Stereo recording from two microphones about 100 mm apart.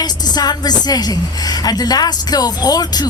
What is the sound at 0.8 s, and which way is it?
A woman's voice, 40° left (ahead or behind).